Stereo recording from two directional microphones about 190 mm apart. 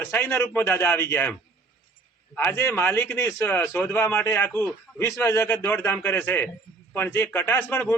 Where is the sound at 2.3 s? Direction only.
10° left (ahead or behind).